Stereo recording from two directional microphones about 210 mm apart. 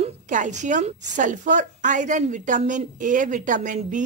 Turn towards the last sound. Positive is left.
turn(degrees=-35)  # may be behind; listen again after turning